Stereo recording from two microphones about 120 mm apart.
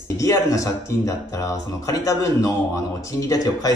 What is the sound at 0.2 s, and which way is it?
A man's voice, 25° left (ahead or behind).